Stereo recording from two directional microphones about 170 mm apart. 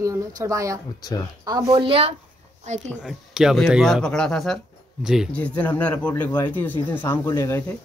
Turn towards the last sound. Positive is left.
turn(degrees=15)  # may be behind; listen again after turning